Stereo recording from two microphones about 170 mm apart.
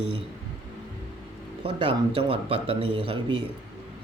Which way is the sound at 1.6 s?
30° right (ahead or behind).